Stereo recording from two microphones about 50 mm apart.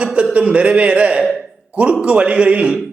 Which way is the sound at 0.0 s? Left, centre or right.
Right.